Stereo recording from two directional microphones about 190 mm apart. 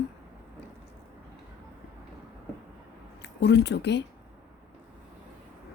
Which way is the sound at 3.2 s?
65° left (ahead or behind).